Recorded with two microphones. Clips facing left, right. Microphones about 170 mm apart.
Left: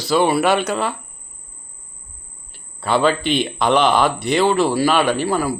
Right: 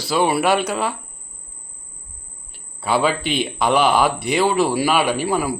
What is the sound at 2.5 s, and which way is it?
A man's voice, 5° right (ahead or behind).